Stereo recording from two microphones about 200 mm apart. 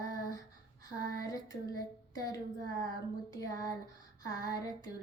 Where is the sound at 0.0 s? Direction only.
15° left (ahead or behind).